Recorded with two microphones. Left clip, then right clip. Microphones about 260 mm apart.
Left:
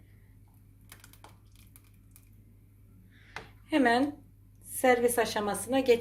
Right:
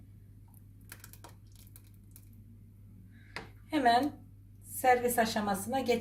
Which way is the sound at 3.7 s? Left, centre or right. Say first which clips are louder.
Left 1 dB; left.